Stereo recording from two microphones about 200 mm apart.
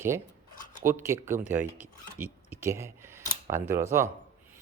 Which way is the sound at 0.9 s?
10° right (ahead or behind).